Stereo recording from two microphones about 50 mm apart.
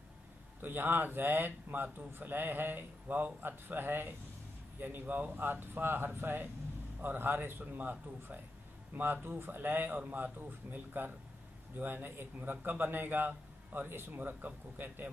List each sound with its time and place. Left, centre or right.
0.6 s a man's voice: right